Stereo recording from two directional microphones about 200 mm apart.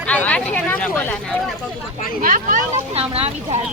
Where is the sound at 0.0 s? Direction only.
5° left (ahead or behind).